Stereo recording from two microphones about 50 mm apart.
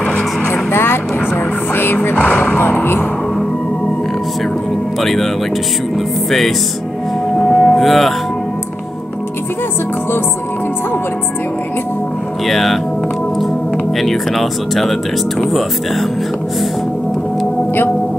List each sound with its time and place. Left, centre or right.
0.5 s vehicle: left
2.1 s music: left
2.6 s music: left
5.0 s music: centre
7.3 s a sound: centre
12.4 s speech: centre
13.9 s speech: centre